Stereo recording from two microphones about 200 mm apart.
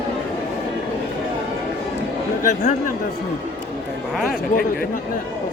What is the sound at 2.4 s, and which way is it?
Speech, 40° left (ahead or behind).